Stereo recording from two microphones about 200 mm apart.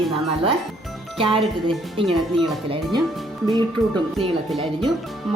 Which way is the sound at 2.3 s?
Centre (ahead or behind).